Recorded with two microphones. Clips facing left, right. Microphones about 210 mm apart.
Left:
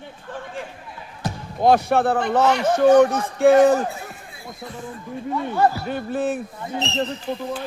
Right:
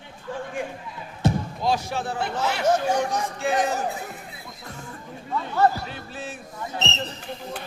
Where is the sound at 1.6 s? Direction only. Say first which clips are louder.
Left 10 dB; 60° left (ahead or behind).